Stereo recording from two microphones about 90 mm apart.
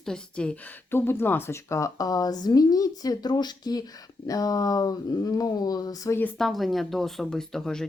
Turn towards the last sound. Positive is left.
turn(degrees=5)  # may be behind; listen again after turning